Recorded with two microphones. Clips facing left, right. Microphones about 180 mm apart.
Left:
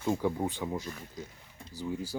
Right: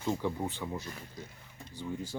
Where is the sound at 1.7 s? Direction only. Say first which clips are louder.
Left 3 dB; 35° left (ahead or behind).